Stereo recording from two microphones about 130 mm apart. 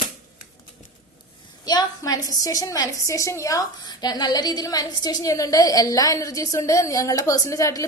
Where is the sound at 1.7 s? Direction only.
30° left (ahead or behind).